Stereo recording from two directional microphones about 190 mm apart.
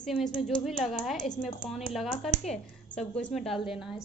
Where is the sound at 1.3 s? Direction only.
25° left (ahead or behind).